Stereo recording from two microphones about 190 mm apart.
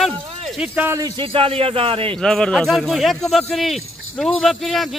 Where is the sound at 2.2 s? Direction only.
5° left (ahead or behind).